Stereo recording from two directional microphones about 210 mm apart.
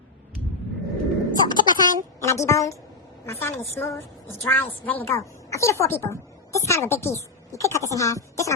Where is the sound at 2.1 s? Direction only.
15° left (ahead or behind).